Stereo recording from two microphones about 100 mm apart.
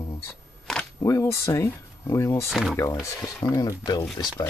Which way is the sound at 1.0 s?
30° left (ahead or behind).